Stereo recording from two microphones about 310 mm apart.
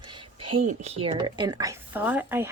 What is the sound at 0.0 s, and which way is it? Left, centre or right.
Speech, centre.